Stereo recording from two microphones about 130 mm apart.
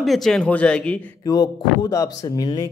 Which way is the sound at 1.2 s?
30° left (ahead or behind).